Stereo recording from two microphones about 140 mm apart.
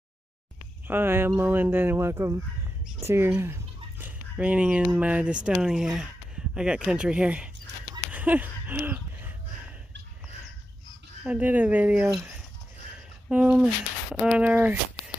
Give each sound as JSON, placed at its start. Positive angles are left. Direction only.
{"t": 0.8, "sound": "speech", "side_deg": -15}
{"t": 8.1, "sound": "a sound", "side_deg": -10}
{"t": 11.2, "sound": "speech", "side_deg": -10}
{"t": 13.3, "sound": "speech", "side_deg": -10}